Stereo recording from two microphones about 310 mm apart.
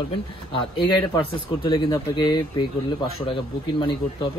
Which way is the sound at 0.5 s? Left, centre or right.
Centre.